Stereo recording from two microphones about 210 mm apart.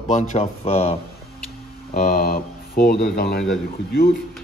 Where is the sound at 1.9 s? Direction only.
40° left (ahead or behind).